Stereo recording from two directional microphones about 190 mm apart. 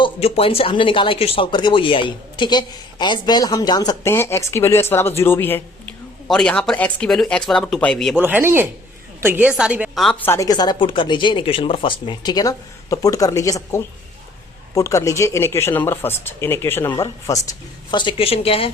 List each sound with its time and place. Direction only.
0.0 s speech: 30° left (ahead or behind); by 8.2 s centre (ahead or behind)
8.2 s a woman's voice: 10° right (ahead or behind); by 17.5 s 15° left (ahead or behind)
17.9 s speech: 25° left (ahead or behind)